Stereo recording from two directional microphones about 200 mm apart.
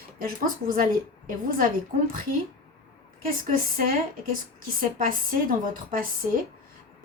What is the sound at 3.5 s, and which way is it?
Speech, 45° right (ahead or behind).